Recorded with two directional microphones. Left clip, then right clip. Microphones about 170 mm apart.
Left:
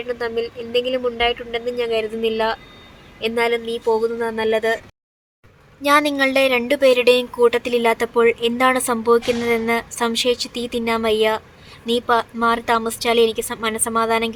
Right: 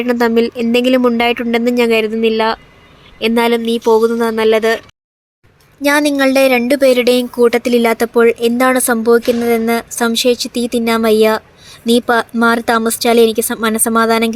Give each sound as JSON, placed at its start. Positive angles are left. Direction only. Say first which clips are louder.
{"t": 0.0, "sound": "a woman's voice", "louder": "right 10 dB", "side_deg": -45}
{"t": 5.8, "sound": "a woman's voice", "louder": "right 4 dB", "side_deg": -25}